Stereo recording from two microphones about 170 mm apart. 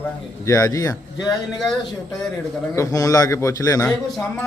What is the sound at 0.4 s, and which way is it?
Speech, 20° left (ahead or behind).